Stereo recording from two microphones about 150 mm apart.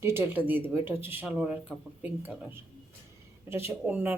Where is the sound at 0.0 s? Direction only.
15° right (ahead or behind).